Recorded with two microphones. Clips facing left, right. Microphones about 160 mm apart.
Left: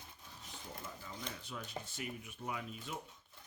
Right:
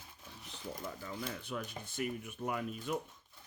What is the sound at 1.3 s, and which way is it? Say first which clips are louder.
Speech: right 4 dB; 60° right (ahead or behind).